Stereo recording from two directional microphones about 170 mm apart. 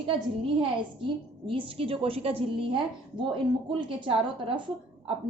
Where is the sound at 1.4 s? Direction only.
30° right (ahead or behind).